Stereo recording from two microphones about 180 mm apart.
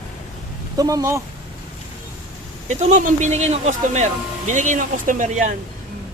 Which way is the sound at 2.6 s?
40° right (ahead or behind).